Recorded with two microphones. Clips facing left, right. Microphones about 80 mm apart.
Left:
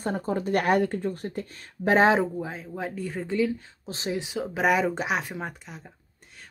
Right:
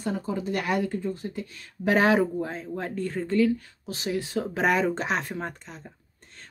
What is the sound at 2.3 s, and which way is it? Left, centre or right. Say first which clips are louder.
Speech: right 2 dB; centre.